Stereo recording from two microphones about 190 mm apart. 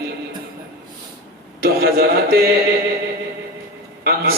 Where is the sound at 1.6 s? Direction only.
55° right (ahead or behind).